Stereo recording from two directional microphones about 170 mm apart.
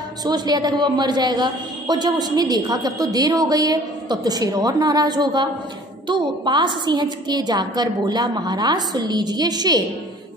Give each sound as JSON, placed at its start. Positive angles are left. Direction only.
{"t": 0.2, "sound": "a woman's voice", "side_deg": -25}